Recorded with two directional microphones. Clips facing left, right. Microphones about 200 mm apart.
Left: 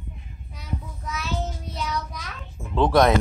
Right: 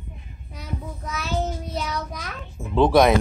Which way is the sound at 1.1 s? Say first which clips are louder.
Right 3 dB; 45° right (ahead or behind).